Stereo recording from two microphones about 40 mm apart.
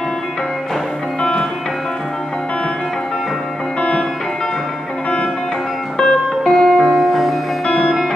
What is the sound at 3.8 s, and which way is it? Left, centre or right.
Music, left.